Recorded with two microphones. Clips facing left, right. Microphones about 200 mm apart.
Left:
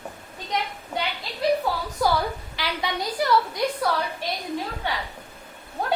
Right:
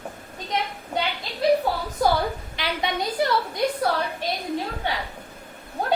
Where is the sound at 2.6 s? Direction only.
25° right (ahead or behind).